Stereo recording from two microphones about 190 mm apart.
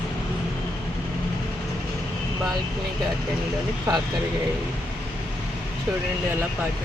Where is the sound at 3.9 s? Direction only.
15° right (ahead or behind).